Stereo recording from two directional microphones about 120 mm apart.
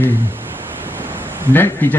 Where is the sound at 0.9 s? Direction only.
15° right (ahead or behind).